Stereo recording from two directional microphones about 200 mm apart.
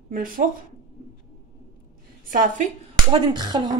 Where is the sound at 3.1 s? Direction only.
20° right (ahead or behind).